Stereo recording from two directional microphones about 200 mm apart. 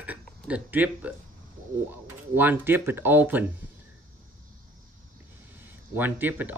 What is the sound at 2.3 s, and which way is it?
Speech, 10° right (ahead or behind).